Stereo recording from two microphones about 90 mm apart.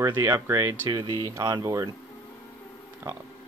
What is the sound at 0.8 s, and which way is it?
Speech, 45° right (ahead or behind).